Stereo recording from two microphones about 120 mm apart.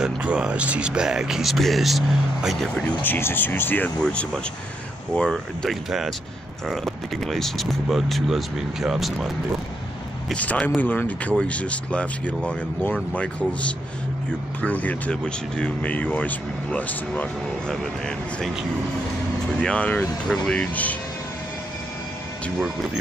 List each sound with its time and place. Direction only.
0.0 s speech: 10° right (ahead or behind)
2.8 s speech: 15° left (ahead or behind); by 9.3 s 5° right (ahead or behind)
10.3 s speech: 10° left (ahead or behind)
19.6 s speech: 10° left (ahead or behind)